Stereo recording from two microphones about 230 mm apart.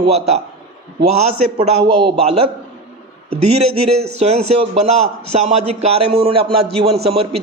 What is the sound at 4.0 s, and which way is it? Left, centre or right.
A man's voice, right.